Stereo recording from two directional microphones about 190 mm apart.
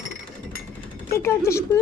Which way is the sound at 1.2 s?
15° left (ahead or behind).